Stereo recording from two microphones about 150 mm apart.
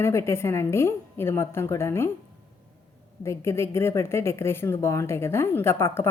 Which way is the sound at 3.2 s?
20° left (ahead or behind).